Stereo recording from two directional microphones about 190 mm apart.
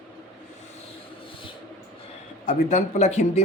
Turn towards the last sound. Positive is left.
turn(degrees=35)  # may be behind; listen again after turning